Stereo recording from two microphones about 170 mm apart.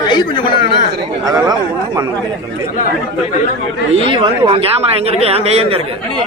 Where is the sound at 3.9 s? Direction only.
35° right (ahead or behind).